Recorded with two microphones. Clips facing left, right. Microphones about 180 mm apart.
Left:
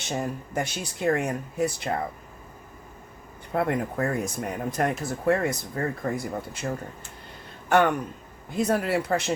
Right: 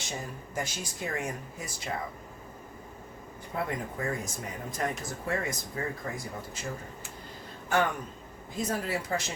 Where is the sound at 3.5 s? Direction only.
65° left (ahead or behind).